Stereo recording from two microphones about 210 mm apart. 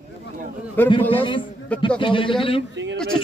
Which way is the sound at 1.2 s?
25° left (ahead or behind).